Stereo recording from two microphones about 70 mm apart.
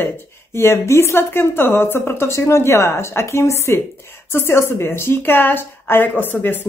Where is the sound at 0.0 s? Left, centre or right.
Left.